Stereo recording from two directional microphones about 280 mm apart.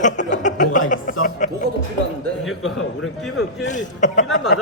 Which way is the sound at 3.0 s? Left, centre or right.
Left.